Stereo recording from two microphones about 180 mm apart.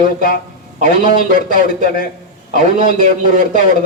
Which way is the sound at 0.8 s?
50° right (ahead or behind).